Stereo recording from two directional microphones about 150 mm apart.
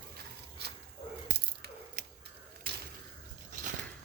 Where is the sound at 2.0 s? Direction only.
90° right.